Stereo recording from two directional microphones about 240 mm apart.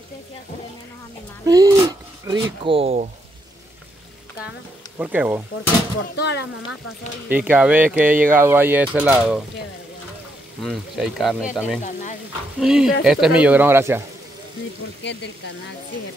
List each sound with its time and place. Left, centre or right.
1.4 s speech: centre
4.9 s speech: centre
5.9 s speech: left
7.2 s speech: centre
10.6 s speech: centre
11.8 s speech: left
12.5 s speech: centre